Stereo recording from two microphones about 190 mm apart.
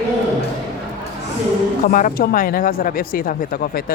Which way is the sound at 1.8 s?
50° left (ahead or behind).